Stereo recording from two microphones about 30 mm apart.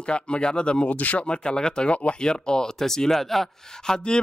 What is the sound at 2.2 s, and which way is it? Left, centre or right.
Speech, left.